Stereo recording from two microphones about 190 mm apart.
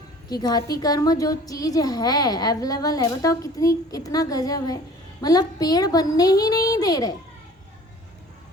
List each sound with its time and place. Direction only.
0.3 s a woman's voice: 20° left (ahead or behind)